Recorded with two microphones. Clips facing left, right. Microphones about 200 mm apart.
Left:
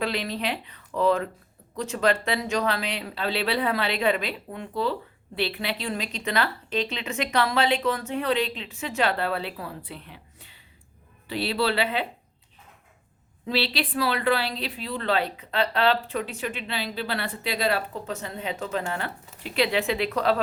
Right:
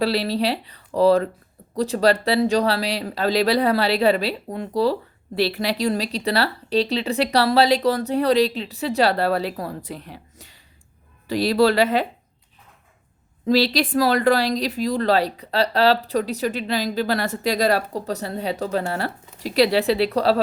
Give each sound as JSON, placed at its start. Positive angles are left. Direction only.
{"t": 0.0, "sound": "speech", "side_deg": -35}
{"t": 13.4, "sound": "speech", "side_deg": -40}